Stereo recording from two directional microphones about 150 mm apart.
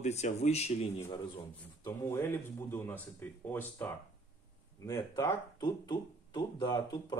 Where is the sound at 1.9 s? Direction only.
20° left (ahead or behind).